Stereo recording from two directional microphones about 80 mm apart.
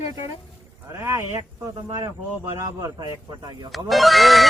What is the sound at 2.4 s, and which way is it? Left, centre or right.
Speech, right.